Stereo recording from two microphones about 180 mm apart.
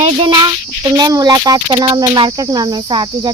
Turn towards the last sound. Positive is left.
turn(degrees=-25)  # may be behind; listen again after turning